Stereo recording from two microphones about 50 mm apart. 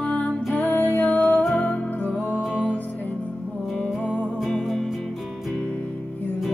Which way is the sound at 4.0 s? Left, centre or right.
Left.